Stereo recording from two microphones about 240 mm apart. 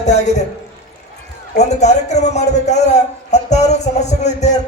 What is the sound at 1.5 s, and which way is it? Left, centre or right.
A man's voice, left.